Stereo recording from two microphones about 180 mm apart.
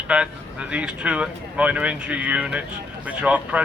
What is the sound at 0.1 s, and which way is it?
Speech, 5° right (ahead or behind).